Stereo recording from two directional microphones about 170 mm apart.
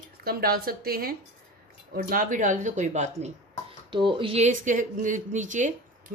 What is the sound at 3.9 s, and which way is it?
Speech, 30° right (ahead or behind).